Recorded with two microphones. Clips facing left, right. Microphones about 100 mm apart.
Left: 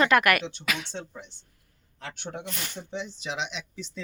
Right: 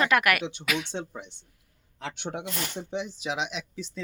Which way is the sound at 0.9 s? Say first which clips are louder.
Right 3 dB; 15° right (ahead or behind).